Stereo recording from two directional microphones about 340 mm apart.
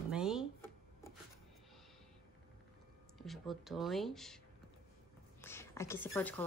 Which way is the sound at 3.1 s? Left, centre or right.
Centre.